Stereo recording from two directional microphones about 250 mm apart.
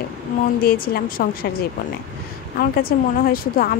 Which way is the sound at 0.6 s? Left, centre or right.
Left.